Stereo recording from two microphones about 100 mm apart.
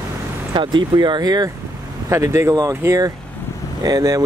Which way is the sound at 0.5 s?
50° right (ahead or behind).